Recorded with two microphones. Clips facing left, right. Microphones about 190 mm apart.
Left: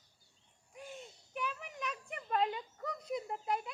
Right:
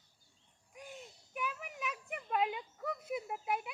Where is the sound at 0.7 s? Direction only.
Centre (ahead or behind).